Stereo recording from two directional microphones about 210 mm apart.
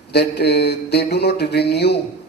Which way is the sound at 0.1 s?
50° left (ahead or behind).